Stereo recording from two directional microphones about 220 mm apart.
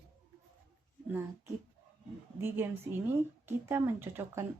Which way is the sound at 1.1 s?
10° right (ahead or behind).